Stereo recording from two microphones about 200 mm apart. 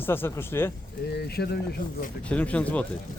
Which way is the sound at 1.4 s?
55° left (ahead or behind).